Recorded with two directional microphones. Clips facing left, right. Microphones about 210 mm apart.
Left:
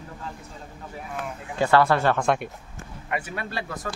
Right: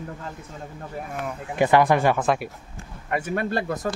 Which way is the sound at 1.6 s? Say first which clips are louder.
Right 2 dB; 15° right (ahead or behind).